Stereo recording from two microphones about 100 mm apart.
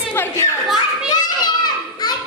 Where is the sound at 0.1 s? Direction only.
20° left (ahead or behind).